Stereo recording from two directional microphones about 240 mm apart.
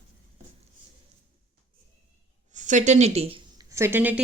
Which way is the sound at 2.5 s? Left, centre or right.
Right.